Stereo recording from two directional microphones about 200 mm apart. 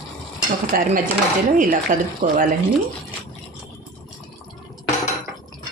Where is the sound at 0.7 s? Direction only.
45° right (ahead or behind).